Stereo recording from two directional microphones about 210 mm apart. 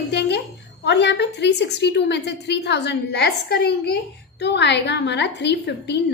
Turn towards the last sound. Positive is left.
turn(degrees=55)  # may be behind; listen again after turning